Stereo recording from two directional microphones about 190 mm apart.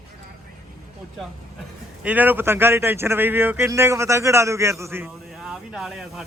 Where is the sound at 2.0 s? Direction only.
10° right (ahead or behind).